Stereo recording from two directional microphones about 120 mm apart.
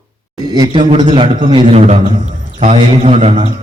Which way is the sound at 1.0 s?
45° right (ahead or behind).